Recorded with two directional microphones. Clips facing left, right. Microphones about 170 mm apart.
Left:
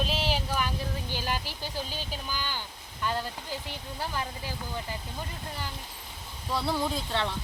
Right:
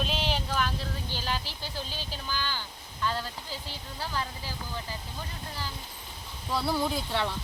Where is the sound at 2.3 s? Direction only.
15° left (ahead or behind).